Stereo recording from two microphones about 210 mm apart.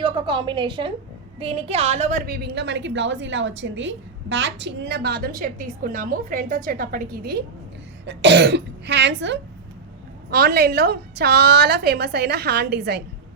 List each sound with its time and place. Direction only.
0.0 s a woman's voice: 25° right (ahead or behind); by 13.0 s 50° right (ahead or behind)